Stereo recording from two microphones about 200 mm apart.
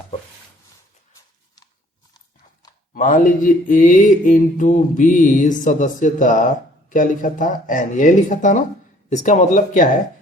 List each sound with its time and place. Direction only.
2.9 s mantra: 40° left (ahead or behind)